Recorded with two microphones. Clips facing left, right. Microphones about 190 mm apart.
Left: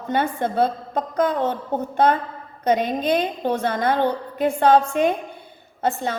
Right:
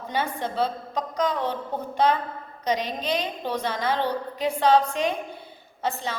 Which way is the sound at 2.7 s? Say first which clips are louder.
Left 6 dB; 50° left (ahead or behind).